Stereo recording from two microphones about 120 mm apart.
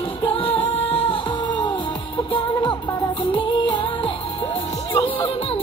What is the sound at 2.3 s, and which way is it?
Music, 40° left (ahead or behind).